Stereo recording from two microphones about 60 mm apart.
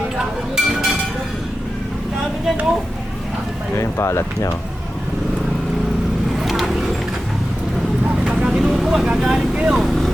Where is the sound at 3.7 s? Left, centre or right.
Left.